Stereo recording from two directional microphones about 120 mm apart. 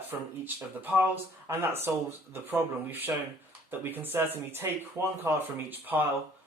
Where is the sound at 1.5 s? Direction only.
20° right (ahead or behind).